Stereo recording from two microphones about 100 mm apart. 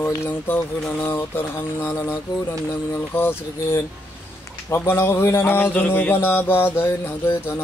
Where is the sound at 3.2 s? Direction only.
25° left (ahead or behind).